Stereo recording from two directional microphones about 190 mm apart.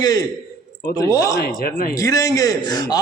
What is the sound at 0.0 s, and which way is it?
A man's voice, 20° left (ahead or behind).